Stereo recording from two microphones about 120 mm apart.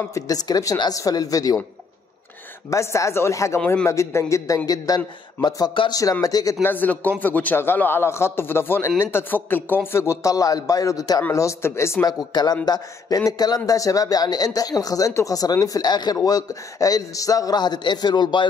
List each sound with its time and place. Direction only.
0.1 s speech: 30° left (ahead or behind)
2.7 s speech: 25° left (ahead or behind)
6.6 s a man's voice: 15° left (ahead or behind); by 18.5 s 40° left (ahead or behind)